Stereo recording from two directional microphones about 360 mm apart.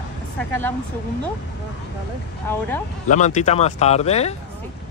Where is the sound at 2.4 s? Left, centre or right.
Centre.